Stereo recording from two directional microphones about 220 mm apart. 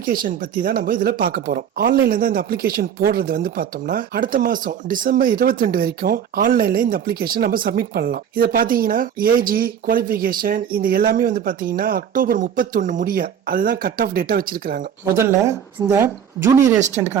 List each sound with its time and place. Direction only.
0.0 s speech: 40° right (ahead or behind)
15.1 s speech: 10° right (ahead or behind)